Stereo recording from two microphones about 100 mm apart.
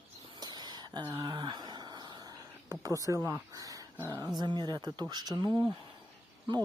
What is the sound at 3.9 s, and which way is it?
Speech, 25° right (ahead or behind).